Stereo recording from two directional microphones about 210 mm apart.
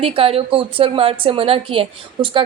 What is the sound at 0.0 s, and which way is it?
A woman's voice, 25° right (ahead or behind).